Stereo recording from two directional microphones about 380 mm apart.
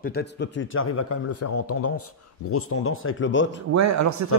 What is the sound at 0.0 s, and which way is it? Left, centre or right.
Speech, left.